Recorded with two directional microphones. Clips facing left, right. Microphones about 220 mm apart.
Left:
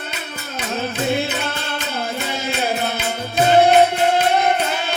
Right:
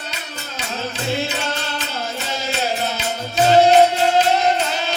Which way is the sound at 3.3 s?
55° left (ahead or behind).